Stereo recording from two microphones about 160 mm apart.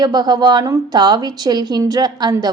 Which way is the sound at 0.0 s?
25° right (ahead or behind).